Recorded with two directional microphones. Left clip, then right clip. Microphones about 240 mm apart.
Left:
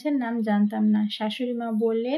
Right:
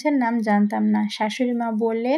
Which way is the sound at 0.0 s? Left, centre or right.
Right.